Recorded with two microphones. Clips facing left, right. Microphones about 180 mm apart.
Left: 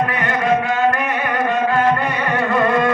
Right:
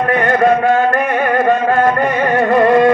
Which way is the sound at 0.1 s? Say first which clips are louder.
Right 6 dB; 45° right (ahead or behind).